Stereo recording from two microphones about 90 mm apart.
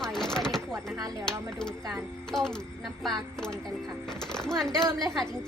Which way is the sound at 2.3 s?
5° left (ahead or behind).